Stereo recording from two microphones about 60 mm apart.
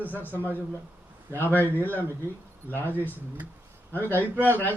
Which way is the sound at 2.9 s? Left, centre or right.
Left.